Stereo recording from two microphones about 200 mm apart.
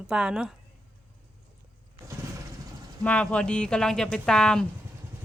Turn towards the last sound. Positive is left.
turn(degrees=5)  # may be behind; listen again after turning